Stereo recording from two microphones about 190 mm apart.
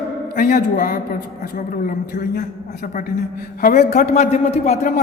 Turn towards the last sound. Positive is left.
turn(degrees=40)  # may be behind; listen again after turning